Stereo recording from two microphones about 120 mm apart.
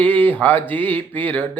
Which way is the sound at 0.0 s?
15° left (ahead or behind).